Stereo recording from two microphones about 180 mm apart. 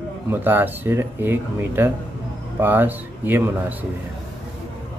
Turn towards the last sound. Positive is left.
turn(degrees=-10)  # may be behind; listen again after turning